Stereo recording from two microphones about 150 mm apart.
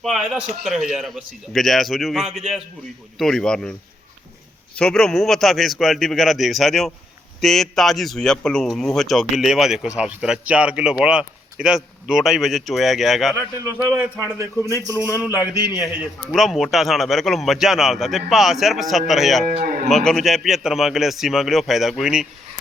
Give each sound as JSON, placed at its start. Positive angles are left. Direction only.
{"t": 0.0, "sound": "speech", "side_deg": 0}
{"t": 4.8, "sound": "speech", "side_deg": 5}
{"t": 13.3, "sound": "a man's voice", "side_deg": -15}
{"t": 14.8, "sound": "a man's voice", "side_deg": 20}
{"t": 15.9, "sound": "speech", "side_deg": -5}